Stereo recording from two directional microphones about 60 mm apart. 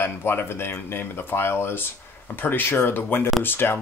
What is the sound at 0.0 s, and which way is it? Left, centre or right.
Speech, left.